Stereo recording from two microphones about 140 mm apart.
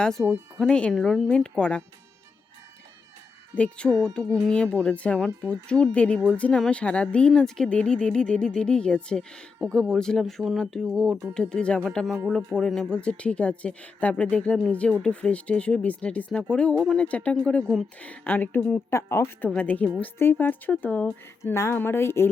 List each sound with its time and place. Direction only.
0.0 s speech: 5° left (ahead or behind)
3.5 s speech: 10° left (ahead or behind)